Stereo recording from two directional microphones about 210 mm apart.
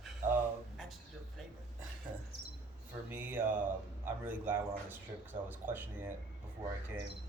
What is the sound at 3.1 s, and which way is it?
Mantra, 10° right (ahead or behind).